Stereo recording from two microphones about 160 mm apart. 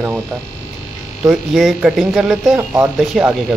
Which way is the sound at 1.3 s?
5° right (ahead or behind).